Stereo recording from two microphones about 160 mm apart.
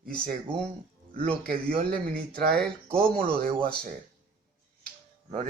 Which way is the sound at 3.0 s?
60° right (ahead or behind).